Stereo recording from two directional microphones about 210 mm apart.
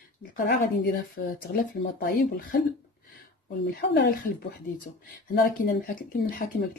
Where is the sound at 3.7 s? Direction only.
50° left (ahead or behind).